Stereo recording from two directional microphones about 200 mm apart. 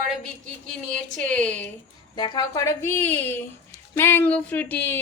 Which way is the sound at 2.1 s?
20° left (ahead or behind).